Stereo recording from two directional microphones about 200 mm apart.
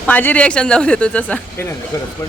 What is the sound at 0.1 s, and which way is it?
Speech, 10° left (ahead or behind).